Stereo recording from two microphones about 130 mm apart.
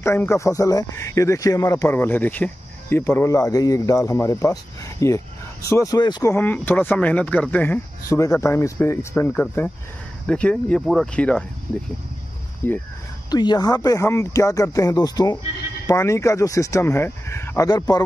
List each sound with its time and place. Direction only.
0.0 s speech: 20° left (ahead or behind)
6.3 s speech: 15° left (ahead or behind)
12.6 s speech: 15° left (ahead or behind)
13.3 s speech: 30° left (ahead or behind)